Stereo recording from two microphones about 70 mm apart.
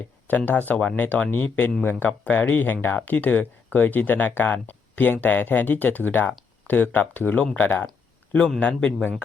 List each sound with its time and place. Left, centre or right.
0.3 s speech: left
8.3 s a man's voice: centre